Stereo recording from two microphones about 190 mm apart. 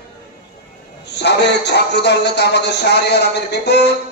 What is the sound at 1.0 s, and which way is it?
Speech, 65° left (ahead or behind).